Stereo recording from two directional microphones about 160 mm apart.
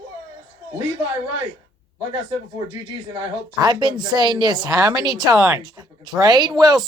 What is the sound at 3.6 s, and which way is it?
Speech, 25° right (ahead or behind).